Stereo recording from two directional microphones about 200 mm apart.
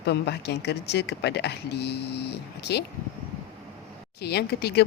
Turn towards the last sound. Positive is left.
turn(degrees=55)  # may be behind; listen again after turning